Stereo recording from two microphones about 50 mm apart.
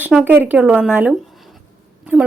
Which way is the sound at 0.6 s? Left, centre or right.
Right.